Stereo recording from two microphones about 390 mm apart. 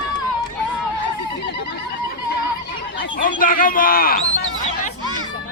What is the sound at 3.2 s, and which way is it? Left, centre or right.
Speech, left.